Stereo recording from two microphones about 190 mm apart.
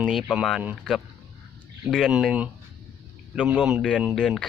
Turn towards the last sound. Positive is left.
turn(degrees=0)  # may be behind; listen again after turning